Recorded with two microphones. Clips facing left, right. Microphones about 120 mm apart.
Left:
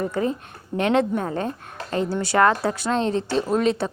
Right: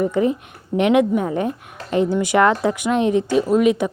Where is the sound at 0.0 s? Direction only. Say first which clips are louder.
Right 5 dB; 20° right (ahead or behind).